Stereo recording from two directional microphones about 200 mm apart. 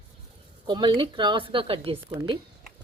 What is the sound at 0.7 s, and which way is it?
Speech, 25° right (ahead or behind).